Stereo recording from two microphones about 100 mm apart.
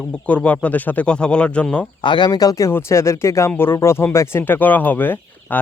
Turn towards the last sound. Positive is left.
turn(degrees=20)  # may be behind; listen again after turning